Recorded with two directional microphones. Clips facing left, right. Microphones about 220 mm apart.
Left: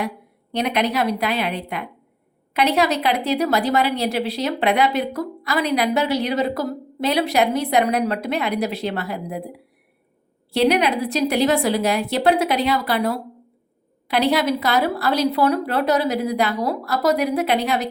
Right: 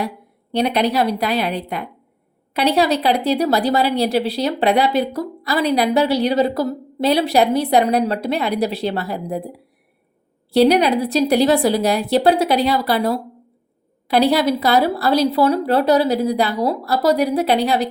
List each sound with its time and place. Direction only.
0.5 s speech: 35° right (ahead or behind)